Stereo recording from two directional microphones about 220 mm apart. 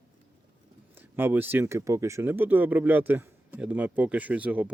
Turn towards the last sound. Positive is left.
turn(degrees=-5)  # may be behind; listen again after turning